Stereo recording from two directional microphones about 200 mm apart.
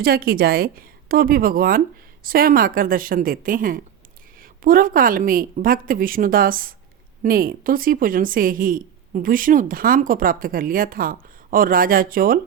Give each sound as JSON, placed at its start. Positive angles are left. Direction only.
{"t": 0.0, "sound": "a woman's voice", "side_deg": -50}